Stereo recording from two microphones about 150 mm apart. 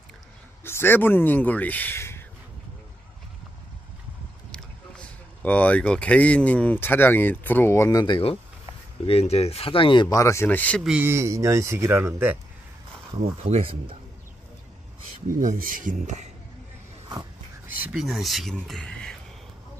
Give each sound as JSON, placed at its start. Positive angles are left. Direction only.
{"t": 0.7, "sound": "speech", "side_deg": 15}
{"t": 4.5, "sound": "speech", "side_deg": 10}
{"t": 10.8, "sound": "a man's voice", "side_deg": -5}
{"t": 11.1, "sound": "speech", "side_deg": -20}
{"t": 13.2, "sound": "speech", "side_deg": -40}
{"t": 15.2, "sound": "speech", "side_deg": -65}
{"t": 17.6, "sound": "speech", "side_deg": -5}